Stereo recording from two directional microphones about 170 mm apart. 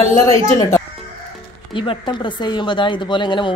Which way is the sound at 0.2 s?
15° left (ahead or behind).